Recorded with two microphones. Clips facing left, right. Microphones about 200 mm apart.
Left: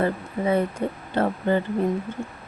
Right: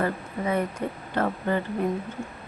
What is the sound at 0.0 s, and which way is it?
Speech, 30° left (ahead or behind).